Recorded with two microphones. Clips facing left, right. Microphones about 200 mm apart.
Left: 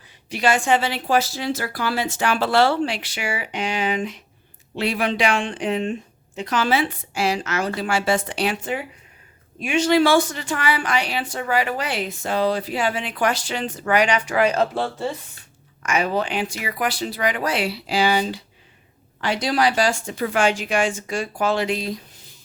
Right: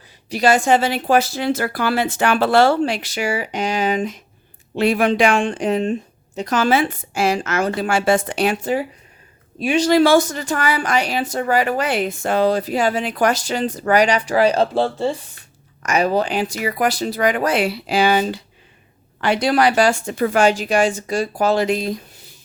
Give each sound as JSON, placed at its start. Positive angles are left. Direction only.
{"t": 0.3, "sound": "speech", "side_deg": -40}
{"t": 15.8, "sound": "speech", "side_deg": -40}